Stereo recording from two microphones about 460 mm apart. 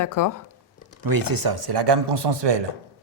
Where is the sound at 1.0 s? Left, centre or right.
Right.